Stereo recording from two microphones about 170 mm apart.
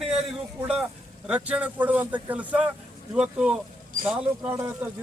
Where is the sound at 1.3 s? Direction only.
10° right (ahead or behind).